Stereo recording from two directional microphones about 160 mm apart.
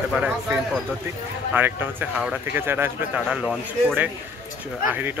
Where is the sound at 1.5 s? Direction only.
10° right (ahead or behind).